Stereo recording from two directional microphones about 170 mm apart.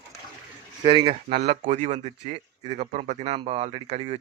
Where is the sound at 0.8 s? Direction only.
30° right (ahead or behind).